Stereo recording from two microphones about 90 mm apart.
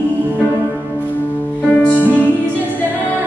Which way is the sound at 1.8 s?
15° left (ahead or behind).